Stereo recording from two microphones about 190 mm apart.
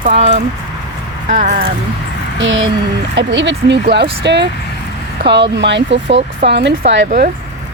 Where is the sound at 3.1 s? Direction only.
70° right (ahead or behind).